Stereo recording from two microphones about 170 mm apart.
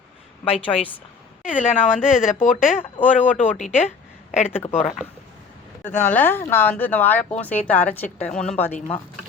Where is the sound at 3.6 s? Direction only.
45° left (ahead or behind).